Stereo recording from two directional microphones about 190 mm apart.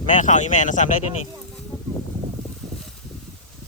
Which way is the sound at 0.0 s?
40° left (ahead or behind).